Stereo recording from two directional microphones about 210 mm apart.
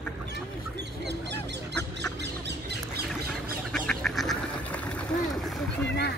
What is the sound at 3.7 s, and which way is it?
Duck, 5° left (ahead or behind).